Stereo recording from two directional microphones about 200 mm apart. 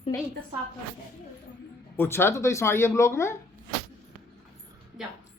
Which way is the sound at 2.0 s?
10° left (ahead or behind).